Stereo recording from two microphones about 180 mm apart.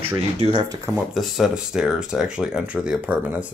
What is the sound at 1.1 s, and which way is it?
Speech, centre (ahead or behind).